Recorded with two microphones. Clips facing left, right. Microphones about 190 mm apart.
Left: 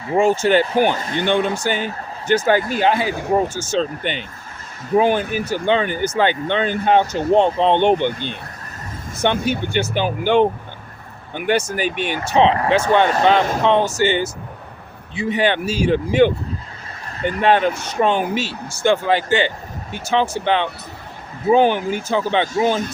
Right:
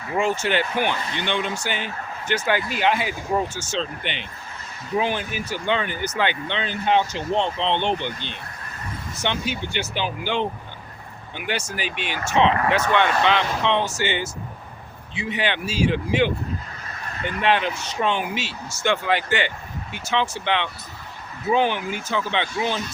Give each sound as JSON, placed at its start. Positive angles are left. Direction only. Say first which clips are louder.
{"t": 0.1, "sound": "speech", "louder": "left 7 dB", "side_deg": 40}
{"t": 12.2, "sound": "speech", "louder": "left 3 dB", "side_deg": 35}